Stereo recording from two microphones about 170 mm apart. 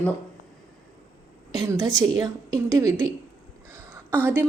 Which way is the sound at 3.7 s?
15° right (ahead or behind).